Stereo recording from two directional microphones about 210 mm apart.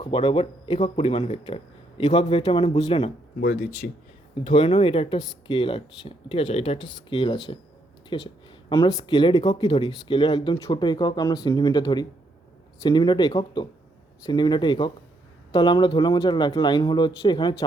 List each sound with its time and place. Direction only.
0.0 s speech: 25° left (ahead or behind)
3.4 s speech: 40° left (ahead or behind); by 17.5 s 20° left (ahead or behind)